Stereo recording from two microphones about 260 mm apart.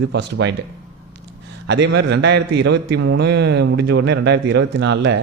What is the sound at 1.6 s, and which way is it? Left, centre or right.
A man's voice, right.